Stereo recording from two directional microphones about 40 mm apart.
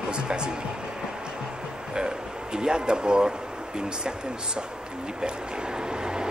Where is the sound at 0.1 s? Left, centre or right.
Right.